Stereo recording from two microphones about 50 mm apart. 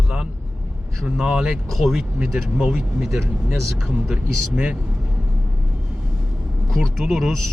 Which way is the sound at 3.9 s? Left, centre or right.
Centre.